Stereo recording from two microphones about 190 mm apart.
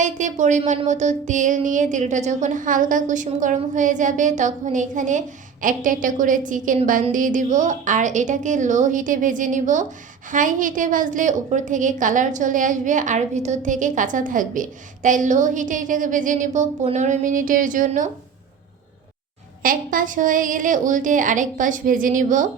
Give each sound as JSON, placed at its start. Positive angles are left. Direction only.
{"t": 0.0, "sound": "a sound", "side_deg": -40}
{"t": 5.6, "sound": "a woman's voice", "side_deg": -45}
{"t": 19.6, "sound": "a woman's voice", "side_deg": -45}